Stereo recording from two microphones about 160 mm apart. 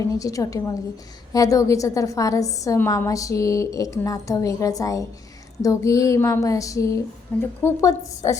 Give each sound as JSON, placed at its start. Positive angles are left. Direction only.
{"t": 0.0, "sound": "a woman's voice", "side_deg": 20}